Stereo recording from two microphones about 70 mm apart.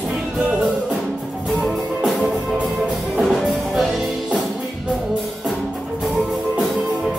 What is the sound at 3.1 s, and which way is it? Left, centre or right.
Music, centre.